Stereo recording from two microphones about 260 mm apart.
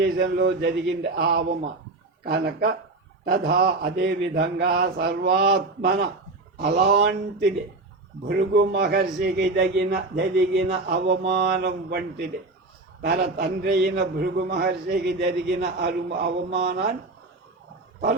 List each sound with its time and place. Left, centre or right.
0.0 s a man's voice: right